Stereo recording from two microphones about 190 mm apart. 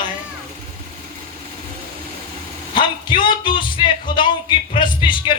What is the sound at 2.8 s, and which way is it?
Speech, 25° left (ahead or behind).